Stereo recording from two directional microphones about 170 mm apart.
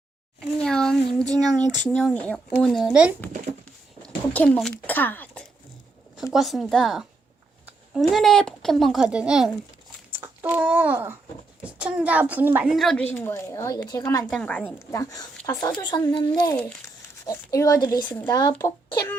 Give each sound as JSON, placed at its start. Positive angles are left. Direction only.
{"t": 0.6, "sound": "child singing", "side_deg": 5}
{"t": 1.5, "sound": "speech", "side_deg": 5}
{"t": 4.0, "sound": "a sound", "side_deg": 5}
{"t": 6.3, "sound": "a woman's voice", "side_deg": 0}
{"t": 12.7, "sound": "a woman's voice", "side_deg": 0}
{"t": 14.3, "sound": "a woman's voice", "side_deg": 5}
{"t": 16.4, "sound": "speech", "side_deg": 10}